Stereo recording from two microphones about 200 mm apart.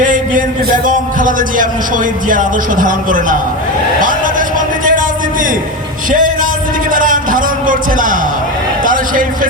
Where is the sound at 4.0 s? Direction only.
40° right (ahead or behind).